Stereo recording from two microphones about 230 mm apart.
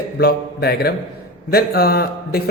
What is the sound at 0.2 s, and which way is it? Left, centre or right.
Mantra, left.